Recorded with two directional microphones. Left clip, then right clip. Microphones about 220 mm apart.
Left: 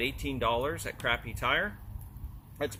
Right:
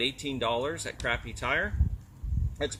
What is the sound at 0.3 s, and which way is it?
Speech, 20° right (ahead or behind).